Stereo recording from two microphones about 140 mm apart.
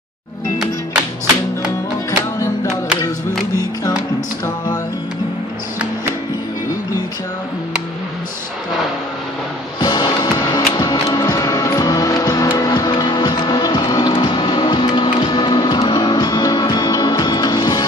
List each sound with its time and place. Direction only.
2.0 s music: 25° left (ahead or behind)
9.8 s music: 30° left (ahead or behind)